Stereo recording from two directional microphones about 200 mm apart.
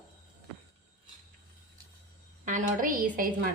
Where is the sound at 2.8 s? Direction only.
45° right (ahead or behind).